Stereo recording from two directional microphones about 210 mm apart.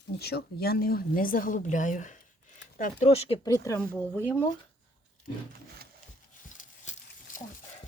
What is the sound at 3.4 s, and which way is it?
Speech, 15° left (ahead or behind).